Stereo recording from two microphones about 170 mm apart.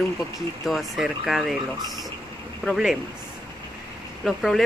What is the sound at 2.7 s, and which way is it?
Speech, 5° right (ahead or behind).